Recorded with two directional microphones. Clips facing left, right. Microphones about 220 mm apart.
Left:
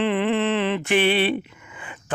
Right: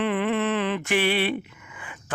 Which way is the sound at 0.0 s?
25° left (ahead or behind).